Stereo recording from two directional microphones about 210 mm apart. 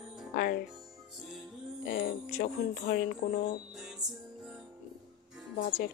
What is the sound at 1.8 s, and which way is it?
Speech, 45° left (ahead or behind).